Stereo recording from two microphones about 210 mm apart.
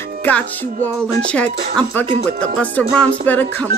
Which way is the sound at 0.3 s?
10° left (ahead or behind).